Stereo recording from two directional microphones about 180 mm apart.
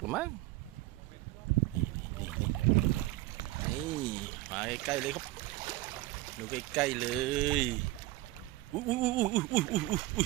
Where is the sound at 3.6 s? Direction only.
20° right (ahead or behind).